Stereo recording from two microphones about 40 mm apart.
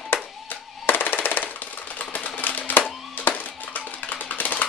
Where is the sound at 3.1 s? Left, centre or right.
Left.